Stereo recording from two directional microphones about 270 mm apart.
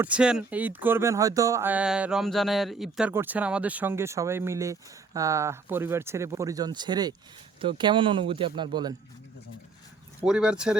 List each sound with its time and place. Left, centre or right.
0.0 s speech: centre
10.2 s speech: centre